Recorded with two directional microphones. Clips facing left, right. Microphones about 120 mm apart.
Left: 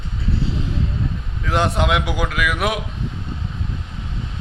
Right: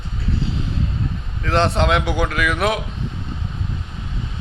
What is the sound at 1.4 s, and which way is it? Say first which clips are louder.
A man's voice: right 2 dB; 10° left (ahead or behind).